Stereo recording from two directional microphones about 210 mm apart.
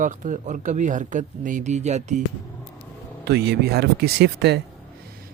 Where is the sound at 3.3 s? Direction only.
50° right (ahead or behind).